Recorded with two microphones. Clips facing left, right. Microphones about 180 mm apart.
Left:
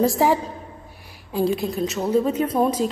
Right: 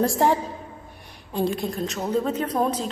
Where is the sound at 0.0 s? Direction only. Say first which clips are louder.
Left 2 dB; centre (ahead or behind).